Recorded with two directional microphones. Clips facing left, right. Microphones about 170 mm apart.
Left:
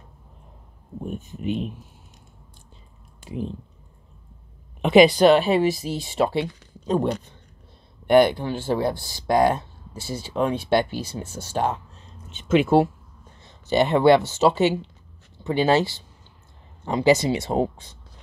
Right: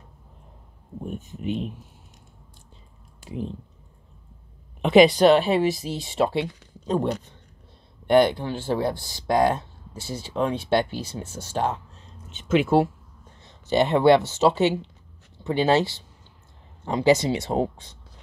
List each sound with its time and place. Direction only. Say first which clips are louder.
1.4 s speech: left 1 dB; 15° left (ahead or behind)
4.8 s speech: left 1 dB; 5° left (ahead or behind)
8.1 s speech: left 2 dB; 10° left (ahead or behind)
12.4 s speech: left 2 dB; 25° left (ahead or behind)
13.7 s speech: left 1 dB; centre (ahead or behind)